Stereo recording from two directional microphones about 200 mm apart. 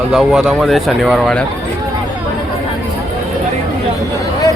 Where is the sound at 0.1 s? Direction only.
Centre (ahead or behind).